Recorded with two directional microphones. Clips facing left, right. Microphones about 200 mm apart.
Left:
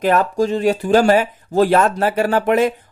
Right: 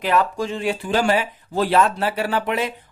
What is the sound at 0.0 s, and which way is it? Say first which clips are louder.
Speech: left 5 dB; 45° left (ahead or behind).